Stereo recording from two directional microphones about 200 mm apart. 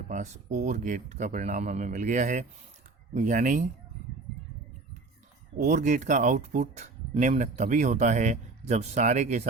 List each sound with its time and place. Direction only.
0.1 s speech: 35° right (ahead or behind)
5.5 s speech: 40° right (ahead or behind)